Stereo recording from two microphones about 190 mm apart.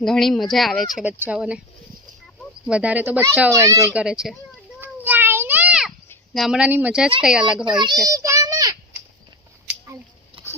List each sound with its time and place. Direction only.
0.0 s speech: centre (ahead or behind)
2.6 s speech: 5° right (ahead or behind)
3.8 s speech: 5° right (ahead or behind)
4.8 s a sound: 10° right (ahead or behind)
6.3 s speech: centre (ahead or behind)
8.1 s child singing: 15° right (ahead or behind)
10.3 s a sound: 25° right (ahead or behind)